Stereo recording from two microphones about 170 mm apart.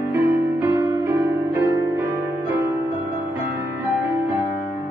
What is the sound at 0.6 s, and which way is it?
Music, 15° right (ahead or behind).